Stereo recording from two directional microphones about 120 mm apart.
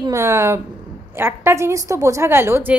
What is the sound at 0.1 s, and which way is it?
A woman's voice, 25° right (ahead or behind).